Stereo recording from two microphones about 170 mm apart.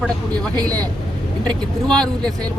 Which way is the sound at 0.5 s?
20° right (ahead or behind).